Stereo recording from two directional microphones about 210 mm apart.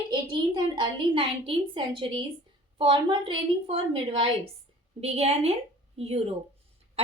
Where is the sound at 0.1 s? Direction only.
20° right (ahead or behind).